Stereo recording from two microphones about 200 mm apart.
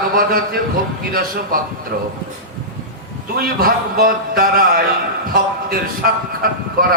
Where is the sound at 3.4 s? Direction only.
45° right (ahead or behind).